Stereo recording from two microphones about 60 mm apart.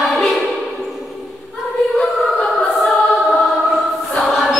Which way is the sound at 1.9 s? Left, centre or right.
Centre.